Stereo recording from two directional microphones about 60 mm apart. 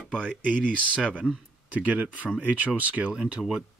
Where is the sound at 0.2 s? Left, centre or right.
Right.